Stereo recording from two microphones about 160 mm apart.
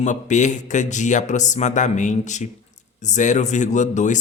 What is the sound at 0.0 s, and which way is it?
Speech, 50° left (ahead or behind).